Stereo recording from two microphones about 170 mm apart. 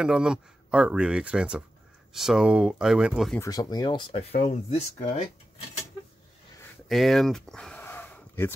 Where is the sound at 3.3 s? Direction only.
20° left (ahead or behind); by 5.3 s 40° left (ahead or behind).